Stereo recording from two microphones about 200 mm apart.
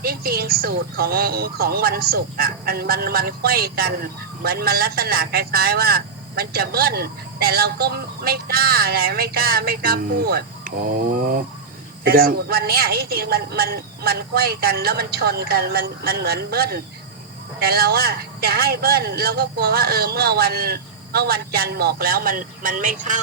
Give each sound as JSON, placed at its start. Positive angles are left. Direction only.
{"t": 0.0, "sound": "speech", "side_deg": -50}